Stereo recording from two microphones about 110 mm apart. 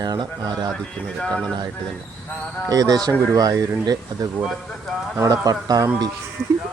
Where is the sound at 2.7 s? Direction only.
35° right (ahead or behind).